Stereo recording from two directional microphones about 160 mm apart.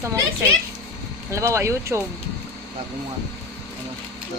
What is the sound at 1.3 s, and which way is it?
Speech, 15° right (ahead or behind).